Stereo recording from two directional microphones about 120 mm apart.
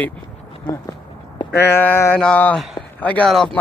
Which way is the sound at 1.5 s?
20° left (ahead or behind).